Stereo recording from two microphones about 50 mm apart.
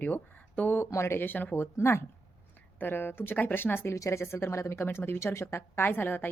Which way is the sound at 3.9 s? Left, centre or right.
Left.